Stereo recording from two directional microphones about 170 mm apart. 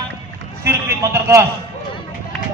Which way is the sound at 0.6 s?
15° right (ahead or behind).